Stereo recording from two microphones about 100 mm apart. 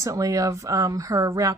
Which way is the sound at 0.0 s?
35° right (ahead or behind).